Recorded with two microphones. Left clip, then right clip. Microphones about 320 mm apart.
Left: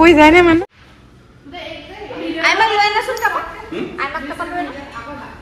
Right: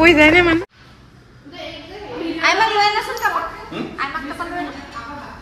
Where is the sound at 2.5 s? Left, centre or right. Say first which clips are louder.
Left 2 dB; centre.